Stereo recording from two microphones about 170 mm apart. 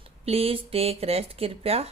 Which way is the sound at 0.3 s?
35° right (ahead or behind).